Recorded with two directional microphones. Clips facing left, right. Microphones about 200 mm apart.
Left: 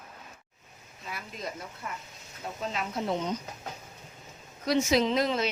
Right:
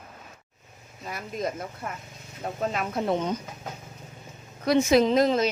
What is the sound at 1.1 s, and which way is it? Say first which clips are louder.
Speech: right 8 dB; 45° right (ahead or behind).